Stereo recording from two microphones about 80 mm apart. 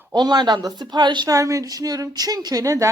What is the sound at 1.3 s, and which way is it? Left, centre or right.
Speech, right.